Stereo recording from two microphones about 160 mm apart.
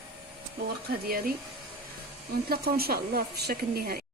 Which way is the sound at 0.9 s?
70° right (ahead or behind).